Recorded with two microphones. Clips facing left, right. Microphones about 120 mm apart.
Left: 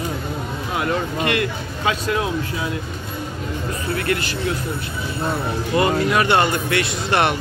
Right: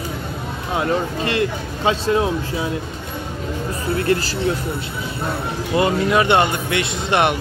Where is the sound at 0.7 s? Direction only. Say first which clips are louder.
Right 2 dB; 30° right (ahead or behind).